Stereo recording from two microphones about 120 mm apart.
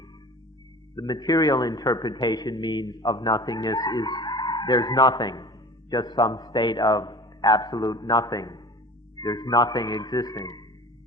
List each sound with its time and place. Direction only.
0.9 s a man's voice: 35° left (ahead or behind)